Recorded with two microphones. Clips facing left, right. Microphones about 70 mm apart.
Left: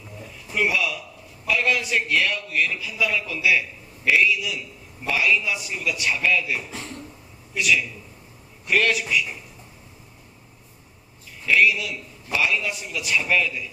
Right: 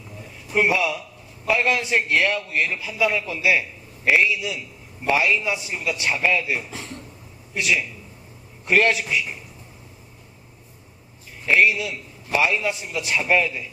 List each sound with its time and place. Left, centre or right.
0.5 s a man's voice: right
11.4 s a man's voice: right